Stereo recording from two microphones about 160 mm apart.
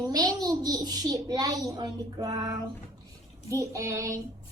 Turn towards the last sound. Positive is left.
turn(degrees=-20)  # may be behind; listen again after turning